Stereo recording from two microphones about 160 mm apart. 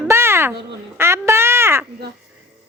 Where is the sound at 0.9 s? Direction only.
15° right (ahead or behind).